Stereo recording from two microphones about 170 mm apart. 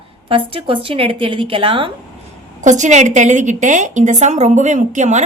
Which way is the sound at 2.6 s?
45° right (ahead or behind).